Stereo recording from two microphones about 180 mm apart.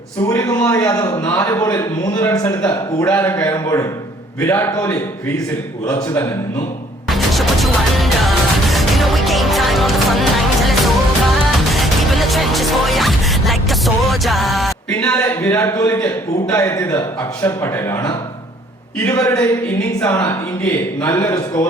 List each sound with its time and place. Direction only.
0.6 s a man's voice: 10° left (ahead or behind)
7.1 s music: centre (ahead or behind)
15.0 s a man's voice: 15° left (ahead or behind)
19.1 s a man's voice: 20° left (ahead or behind)